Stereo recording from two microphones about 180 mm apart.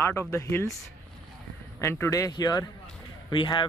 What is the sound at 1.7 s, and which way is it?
Speech, 15° left (ahead or behind).